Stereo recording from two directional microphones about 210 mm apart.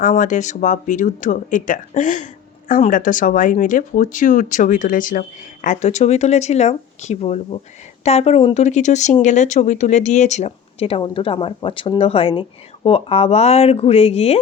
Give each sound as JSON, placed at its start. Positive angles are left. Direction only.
{"t": 0.0, "sound": "speech", "side_deg": 35}